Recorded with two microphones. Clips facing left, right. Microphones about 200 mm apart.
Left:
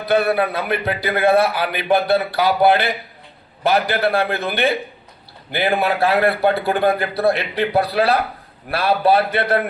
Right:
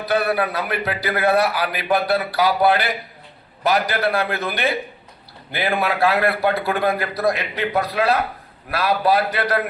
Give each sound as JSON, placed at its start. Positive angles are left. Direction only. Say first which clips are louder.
{"t": 0.1, "sound": "a man's voice", "louder": "left 3 dB", "side_deg": 25}
{"t": 5.6, "sound": "a man's voice", "louder": "left 3 dB", "side_deg": 30}
{"t": 6.2, "sound": "a man's voice", "louder": "left 3 dB", "side_deg": 0}
{"t": 6.7, "sound": "a man's voice", "louder": "left 3 dB", "side_deg": 30}